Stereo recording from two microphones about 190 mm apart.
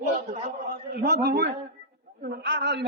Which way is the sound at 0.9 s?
60° right (ahead or behind).